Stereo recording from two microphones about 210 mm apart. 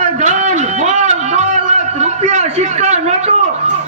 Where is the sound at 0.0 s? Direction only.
35° right (ahead or behind).